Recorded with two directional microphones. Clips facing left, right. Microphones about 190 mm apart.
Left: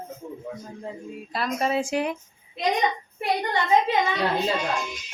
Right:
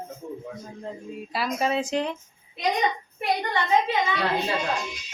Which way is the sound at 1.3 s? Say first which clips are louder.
Left 1 dB; centre (ahead or behind).